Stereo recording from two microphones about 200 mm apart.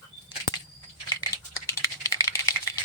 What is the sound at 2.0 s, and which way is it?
Typing, 15° left (ahead or behind).